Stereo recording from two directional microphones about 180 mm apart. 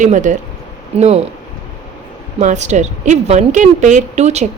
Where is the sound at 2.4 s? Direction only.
40° right (ahead or behind).